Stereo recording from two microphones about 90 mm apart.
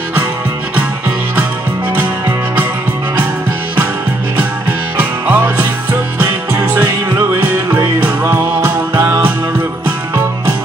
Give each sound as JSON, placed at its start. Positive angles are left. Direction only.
{"t": 2.0, "sound": "music", "side_deg": -20}
{"t": 4.4, "sound": "music", "side_deg": -20}